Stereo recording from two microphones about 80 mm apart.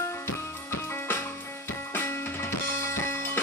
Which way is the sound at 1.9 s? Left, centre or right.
Left.